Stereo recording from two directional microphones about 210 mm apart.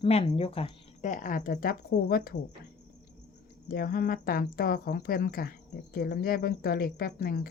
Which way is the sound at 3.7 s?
45° left (ahead or behind).